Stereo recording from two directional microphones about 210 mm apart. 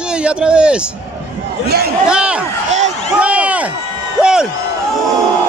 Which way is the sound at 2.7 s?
35° right (ahead or behind).